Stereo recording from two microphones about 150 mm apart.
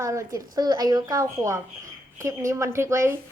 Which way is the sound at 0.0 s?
20° right (ahead or behind).